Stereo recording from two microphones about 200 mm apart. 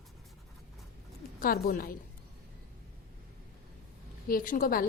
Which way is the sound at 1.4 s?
45° left (ahead or behind).